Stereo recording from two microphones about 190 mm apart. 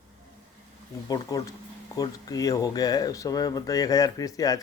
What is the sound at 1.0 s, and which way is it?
Speech, 20° left (ahead or behind).